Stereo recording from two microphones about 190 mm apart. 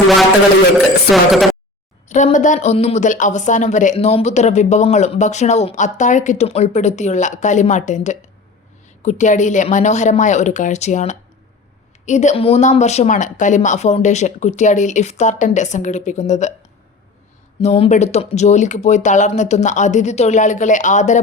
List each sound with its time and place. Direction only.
1.1 s speech: centre (ahead or behind)
2.0 s a woman's voice: 40° left (ahead or behind)
17.6 s a woman's voice: 35° left (ahead or behind)